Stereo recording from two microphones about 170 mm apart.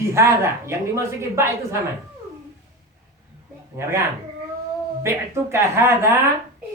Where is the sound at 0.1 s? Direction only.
15° right (ahead or behind).